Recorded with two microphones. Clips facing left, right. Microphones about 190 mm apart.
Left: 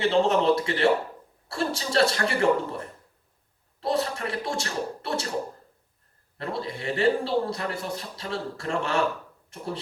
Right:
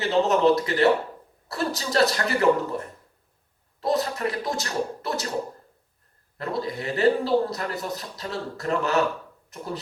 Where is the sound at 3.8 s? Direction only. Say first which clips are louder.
Right 2 dB; 30° left (ahead or behind).